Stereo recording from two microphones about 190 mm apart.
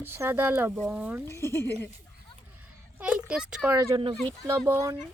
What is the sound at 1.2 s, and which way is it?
Speech, 15° left (ahead or behind).